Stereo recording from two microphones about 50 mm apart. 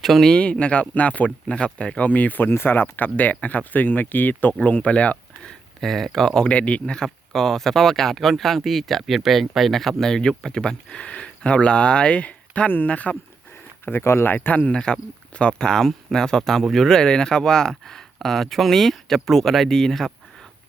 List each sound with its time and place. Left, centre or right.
0.0 s speech: centre
0.3 s speech: centre
5.8 s speech: centre
6.5 s speech: left
13.8 s speech: left
14.3 s speech: left
14.7 s speech: centre